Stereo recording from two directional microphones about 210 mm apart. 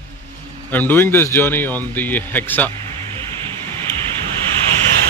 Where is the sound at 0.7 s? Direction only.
10° left (ahead or behind).